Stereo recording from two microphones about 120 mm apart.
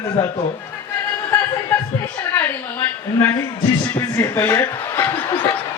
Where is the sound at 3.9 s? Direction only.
20° left (ahead or behind).